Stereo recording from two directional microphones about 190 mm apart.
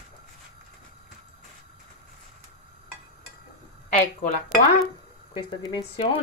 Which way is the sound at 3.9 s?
5° left (ahead or behind).